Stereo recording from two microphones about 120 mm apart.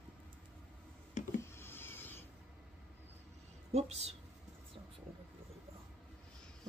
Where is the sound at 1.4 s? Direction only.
20° left (ahead or behind).